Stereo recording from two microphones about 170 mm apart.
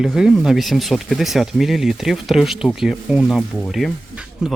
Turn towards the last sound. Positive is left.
turn(degrees=-5)  # may be behind; listen again after turning